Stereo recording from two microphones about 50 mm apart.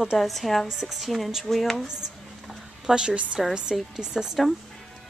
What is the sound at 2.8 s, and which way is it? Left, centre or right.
Speech, centre.